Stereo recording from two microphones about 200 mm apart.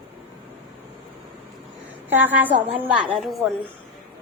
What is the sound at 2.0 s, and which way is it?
A child's voice, 10° right (ahead or behind).